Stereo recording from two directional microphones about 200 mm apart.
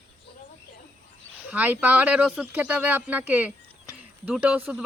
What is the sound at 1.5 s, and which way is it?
Speech, 10° right (ahead or behind).